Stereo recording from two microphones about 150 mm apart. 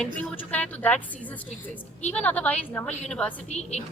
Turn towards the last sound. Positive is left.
turn(degrees=45)  # may be behind; listen again after turning